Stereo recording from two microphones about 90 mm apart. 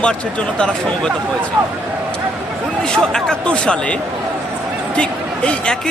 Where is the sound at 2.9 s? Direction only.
10° left (ahead or behind).